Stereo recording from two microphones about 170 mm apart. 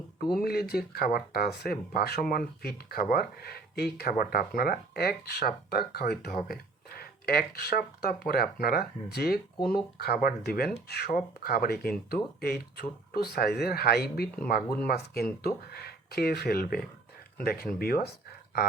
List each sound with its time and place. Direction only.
0.2 s speech: 65° left (ahead or behind)